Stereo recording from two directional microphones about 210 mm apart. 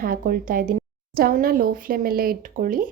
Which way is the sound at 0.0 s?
45° right (ahead or behind).